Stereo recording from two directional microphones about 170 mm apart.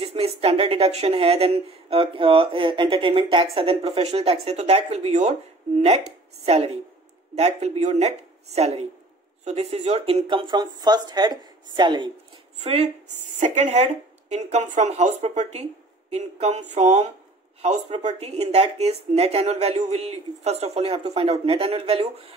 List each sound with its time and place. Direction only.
0.0 s speech: 35° right (ahead or behind)
6.4 s speech: 35° right (ahead or behind)
12.5 s speech: 40° right (ahead or behind)